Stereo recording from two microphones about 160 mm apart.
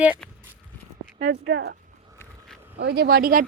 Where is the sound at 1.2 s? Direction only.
90° right.